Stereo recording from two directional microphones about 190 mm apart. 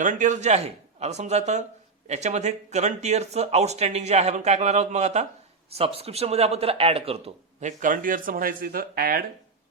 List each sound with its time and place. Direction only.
0.0 s speech: 40° right (ahead or behind)
7.6 s speech: 45° right (ahead or behind)